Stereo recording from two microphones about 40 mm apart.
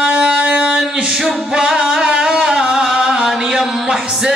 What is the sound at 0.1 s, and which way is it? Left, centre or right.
Music, right.